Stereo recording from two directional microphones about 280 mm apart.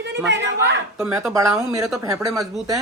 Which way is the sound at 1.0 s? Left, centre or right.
Centre.